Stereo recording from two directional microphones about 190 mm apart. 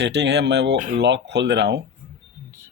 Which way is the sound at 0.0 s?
65° right (ahead or behind).